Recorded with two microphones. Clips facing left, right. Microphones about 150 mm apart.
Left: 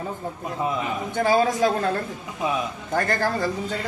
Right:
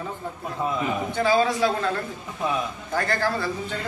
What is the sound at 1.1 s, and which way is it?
Speech, 45° left (ahead or behind).